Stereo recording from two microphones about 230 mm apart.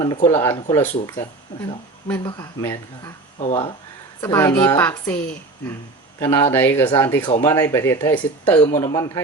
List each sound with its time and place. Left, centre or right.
0.3 s speech: centre
3.3 s speech: left
4.2 s speech: centre